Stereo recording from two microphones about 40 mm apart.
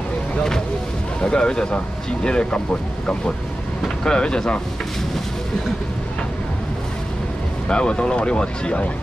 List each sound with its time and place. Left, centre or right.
1.2 s speech: left
7.6 s speech: left